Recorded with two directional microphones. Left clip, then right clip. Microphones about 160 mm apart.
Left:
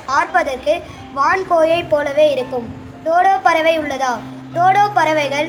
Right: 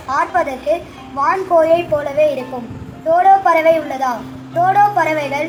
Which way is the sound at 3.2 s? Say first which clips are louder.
Right 3 dB; 45° left (ahead or behind).